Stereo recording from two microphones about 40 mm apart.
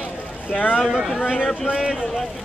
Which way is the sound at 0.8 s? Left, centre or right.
Centre.